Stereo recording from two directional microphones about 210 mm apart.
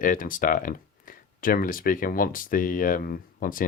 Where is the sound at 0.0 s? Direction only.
40° left (ahead or behind).